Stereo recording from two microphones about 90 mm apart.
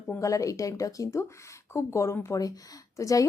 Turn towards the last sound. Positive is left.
turn(degrees=35)  # may be behind; listen again after turning